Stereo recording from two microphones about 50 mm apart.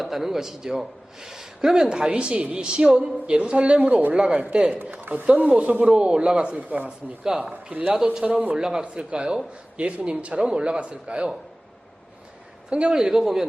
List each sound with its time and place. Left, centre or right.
0.0 s a man's voice: centre; by 4.5 s right
4.5 s speech: right
4.9 s speech: right
5.8 s a man's voice: centre
7.3 s a man's voice: centre
7.5 s speech: right
7.9 s a man's voice: centre
12.9 s a man's voice: centre